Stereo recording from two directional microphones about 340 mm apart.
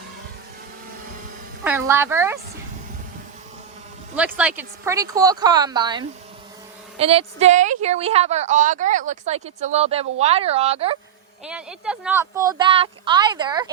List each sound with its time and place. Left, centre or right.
1.6 s speech: centre
4.1 s a woman's voice: centre
11.4 s speech: centre